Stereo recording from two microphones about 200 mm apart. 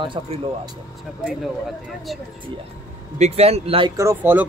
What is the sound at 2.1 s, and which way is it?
Speech, centre (ahead or behind).